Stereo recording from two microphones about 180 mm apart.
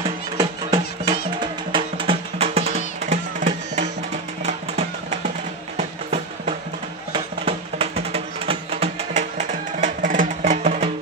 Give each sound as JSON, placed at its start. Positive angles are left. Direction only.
{"t": 0.4, "sound": "music", "side_deg": -20}